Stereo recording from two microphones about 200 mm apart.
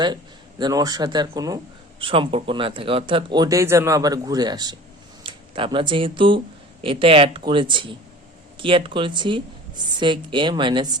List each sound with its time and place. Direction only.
0.6 s speech: 20° right (ahead or behind)